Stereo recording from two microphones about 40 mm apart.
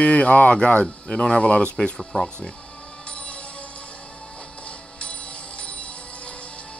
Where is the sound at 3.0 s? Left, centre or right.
Left.